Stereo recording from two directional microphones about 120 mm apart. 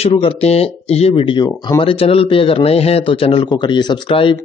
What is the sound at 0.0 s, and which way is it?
Speech, 50° left (ahead or behind).